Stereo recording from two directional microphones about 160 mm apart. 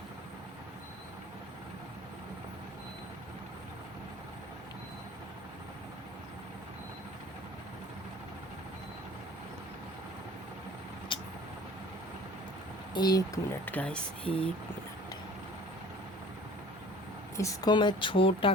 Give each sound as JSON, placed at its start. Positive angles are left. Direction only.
{"t": 11.1, "sound": "vehicle", "side_deg": 30}
{"t": 12.9, "sound": "speech", "side_deg": 25}
{"t": 17.3, "sound": "a woman's voice", "side_deg": 20}